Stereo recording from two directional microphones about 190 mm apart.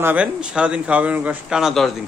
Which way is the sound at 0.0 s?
5° right (ahead or behind).